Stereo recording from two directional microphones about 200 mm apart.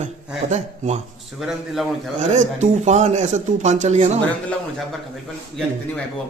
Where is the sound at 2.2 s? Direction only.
35° right (ahead or behind).